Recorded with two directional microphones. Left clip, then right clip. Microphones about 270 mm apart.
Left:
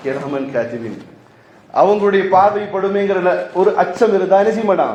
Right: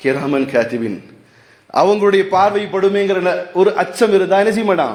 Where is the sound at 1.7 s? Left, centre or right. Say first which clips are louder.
Even; right.